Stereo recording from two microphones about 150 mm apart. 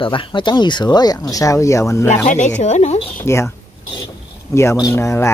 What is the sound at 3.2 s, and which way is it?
Speech, 15° left (ahead or behind).